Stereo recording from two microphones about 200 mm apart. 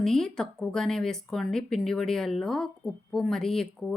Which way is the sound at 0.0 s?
Centre (ahead or behind).